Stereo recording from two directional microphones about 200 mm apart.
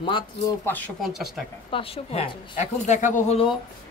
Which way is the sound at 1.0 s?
Centre (ahead or behind).